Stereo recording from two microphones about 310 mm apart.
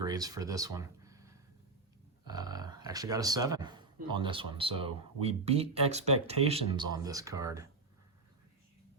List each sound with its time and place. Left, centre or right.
0.0 s speech: centre